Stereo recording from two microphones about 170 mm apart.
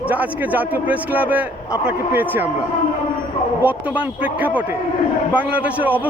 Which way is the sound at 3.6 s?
10° right (ahead or behind).